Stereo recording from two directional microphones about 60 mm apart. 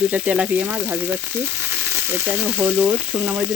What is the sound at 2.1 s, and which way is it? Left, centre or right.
Frying, right.